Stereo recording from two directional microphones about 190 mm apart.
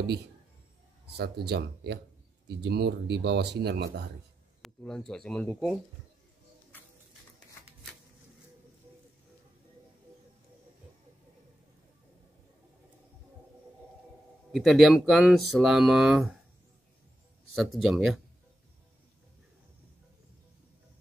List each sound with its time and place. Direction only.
1.1 s speech: 60° right (ahead or behind)
4.6 s speech: centre (ahead or behind)
14.5 s speech: centre (ahead or behind)
17.6 s speech: centre (ahead or behind)